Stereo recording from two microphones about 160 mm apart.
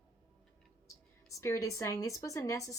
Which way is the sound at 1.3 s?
20° left (ahead or behind).